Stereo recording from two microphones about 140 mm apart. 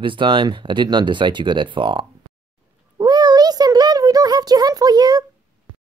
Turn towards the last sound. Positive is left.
turn(degrees=-30)  # may be behind; listen again after turning